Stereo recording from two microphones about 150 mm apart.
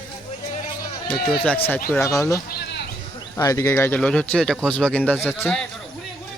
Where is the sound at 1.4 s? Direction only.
10° left (ahead or behind).